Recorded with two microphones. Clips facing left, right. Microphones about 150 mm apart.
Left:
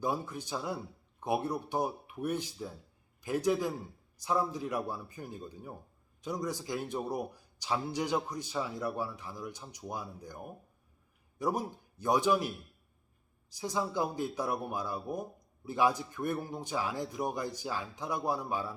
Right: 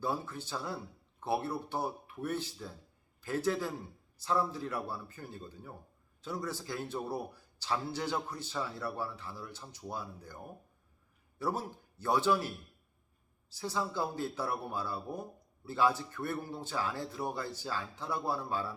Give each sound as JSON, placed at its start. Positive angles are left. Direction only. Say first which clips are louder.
{"t": 0.0, "sound": "a man's voice", "louder": "left 2 dB", "side_deg": 15}